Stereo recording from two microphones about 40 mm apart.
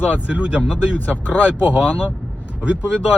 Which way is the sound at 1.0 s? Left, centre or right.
Left.